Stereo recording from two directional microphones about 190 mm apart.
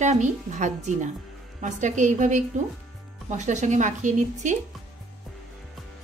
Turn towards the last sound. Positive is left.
turn(degrees=-40)  # may be behind; listen again after turning